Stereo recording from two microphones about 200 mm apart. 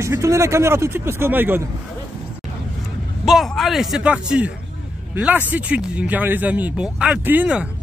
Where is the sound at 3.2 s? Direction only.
Centre (ahead or behind).